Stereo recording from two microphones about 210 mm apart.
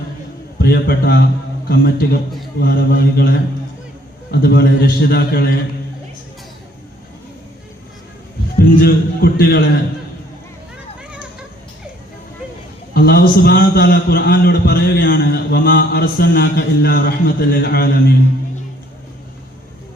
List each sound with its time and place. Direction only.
0.6 s a man's voice: 45° left (ahead or behind)
8.5 s a man's voice: 45° left (ahead or behind)
12.9 s a man's voice: 45° left (ahead or behind)